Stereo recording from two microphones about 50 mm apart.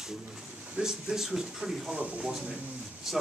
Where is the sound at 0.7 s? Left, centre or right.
Centre.